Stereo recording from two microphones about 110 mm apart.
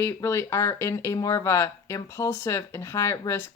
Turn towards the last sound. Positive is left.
turn(degrees=25)  # may be behind; listen again after turning